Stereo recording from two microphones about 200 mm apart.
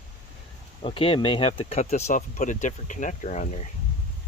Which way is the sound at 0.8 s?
25° left (ahead or behind).